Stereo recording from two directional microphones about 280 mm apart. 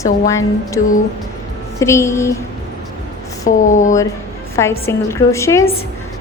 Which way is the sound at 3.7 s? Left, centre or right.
Left.